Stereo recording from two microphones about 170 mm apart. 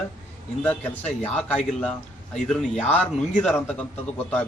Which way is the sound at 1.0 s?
40° left (ahead or behind).